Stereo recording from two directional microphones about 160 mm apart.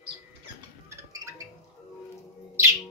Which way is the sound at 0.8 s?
20° right (ahead or behind).